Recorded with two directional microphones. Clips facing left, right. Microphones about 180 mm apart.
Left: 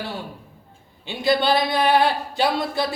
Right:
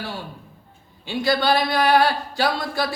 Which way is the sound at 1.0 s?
20° left (ahead or behind).